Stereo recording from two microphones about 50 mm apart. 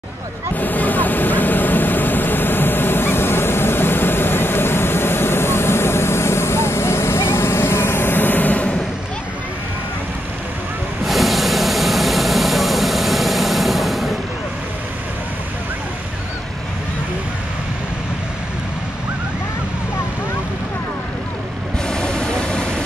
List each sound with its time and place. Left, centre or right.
0.6 s vehicle: left
11.1 s vehicle: centre
21.8 s vehicle: centre